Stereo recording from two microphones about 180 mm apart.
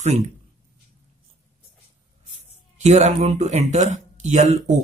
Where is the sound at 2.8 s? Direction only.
35° right (ahead or behind).